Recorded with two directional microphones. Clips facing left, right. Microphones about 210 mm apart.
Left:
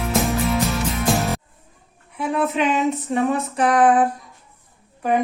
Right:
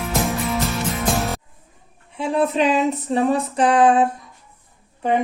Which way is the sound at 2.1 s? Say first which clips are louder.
Right 2 dB; 30° right (ahead or behind).